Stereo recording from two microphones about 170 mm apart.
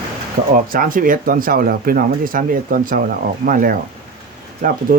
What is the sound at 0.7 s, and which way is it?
Speech, 55° right (ahead or behind).